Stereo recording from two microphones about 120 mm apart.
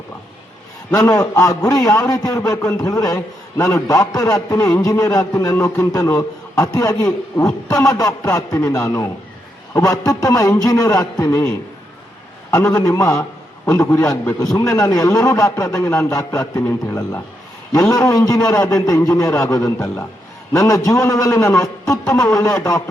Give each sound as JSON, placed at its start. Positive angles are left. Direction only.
{"t": 0.9, "sound": "a man's voice", "side_deg": 30}
{"t": 12.5, "sound": "a man's voice", "side_deg": 25}